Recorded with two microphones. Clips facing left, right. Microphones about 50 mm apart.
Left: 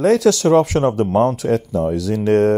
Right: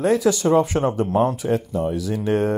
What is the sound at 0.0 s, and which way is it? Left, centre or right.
Speech, left.